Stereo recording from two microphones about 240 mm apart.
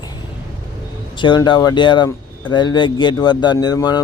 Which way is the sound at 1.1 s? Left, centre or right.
Centre.